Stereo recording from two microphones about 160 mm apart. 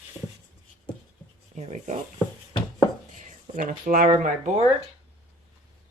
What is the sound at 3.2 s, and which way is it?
Speech, 55° right (ahead or behind).